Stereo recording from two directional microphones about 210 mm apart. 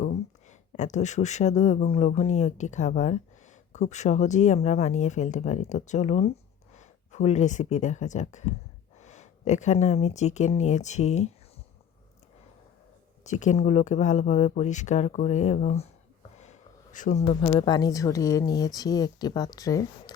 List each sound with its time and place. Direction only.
0.0 s speech: 35° left (ahead or behind)
13.2 s speech: 35° left (ahead or behind); by 20.1 s 15° left (ahead or behind)